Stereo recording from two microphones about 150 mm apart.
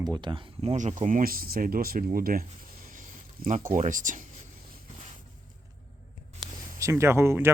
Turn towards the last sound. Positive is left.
turn(degrees=-15)  # may be behind; listen again after turning